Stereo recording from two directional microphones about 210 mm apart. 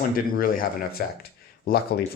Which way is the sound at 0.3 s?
45° left (ahead or behind).